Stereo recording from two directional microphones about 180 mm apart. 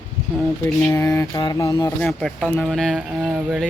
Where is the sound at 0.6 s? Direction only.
10° left (ahead or behind).